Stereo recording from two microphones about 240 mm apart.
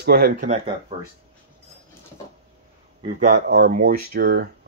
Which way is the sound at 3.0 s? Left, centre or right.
Right.